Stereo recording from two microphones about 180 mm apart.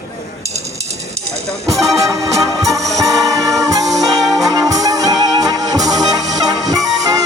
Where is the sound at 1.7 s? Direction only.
15° right (ahead or behind).